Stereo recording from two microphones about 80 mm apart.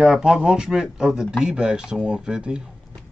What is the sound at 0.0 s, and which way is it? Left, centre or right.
Speech, centre.